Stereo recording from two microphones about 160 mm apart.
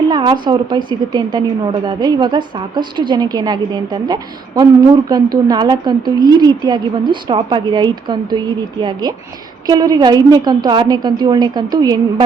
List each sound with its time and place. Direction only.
0.1 s a woman's voice: 25° right (ahead or behind)